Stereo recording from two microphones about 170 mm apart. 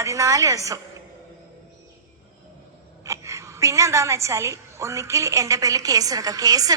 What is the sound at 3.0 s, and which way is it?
A woman's voice, 15° right (ahead or behind).